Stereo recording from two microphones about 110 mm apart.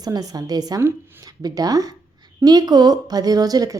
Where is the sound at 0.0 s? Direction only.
35° right (ahead or behind).